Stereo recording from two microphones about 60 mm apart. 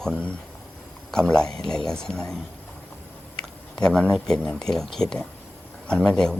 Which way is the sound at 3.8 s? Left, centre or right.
Centre.